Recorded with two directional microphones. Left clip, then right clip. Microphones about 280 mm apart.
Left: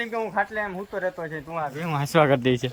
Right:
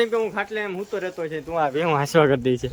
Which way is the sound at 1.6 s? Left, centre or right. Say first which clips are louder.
Right 8 dB; right.